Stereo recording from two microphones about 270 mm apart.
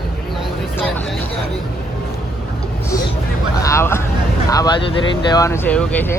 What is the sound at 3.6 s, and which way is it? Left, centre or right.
Speech, centre.